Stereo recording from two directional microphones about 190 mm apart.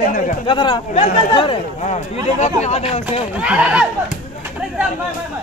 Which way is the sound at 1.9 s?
40° left (ahead or behind).